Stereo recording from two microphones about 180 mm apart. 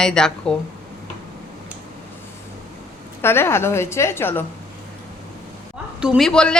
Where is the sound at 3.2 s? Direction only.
15° left (ahead or behind).